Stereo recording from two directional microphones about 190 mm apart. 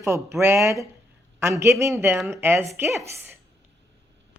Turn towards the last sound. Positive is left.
turn(degrees=-15)  # may be behind; listen again after turning